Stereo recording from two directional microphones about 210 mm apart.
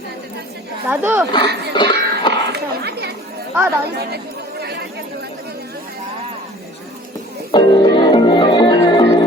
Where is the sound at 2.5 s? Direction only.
50° right (ahead or behind).